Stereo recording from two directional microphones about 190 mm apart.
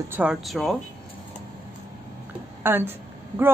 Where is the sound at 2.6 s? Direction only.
10° right (ahead or behind).